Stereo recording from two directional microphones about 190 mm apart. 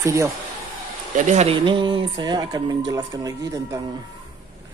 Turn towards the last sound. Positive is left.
turn(degrees=-20)  # may be behind; listen again after turning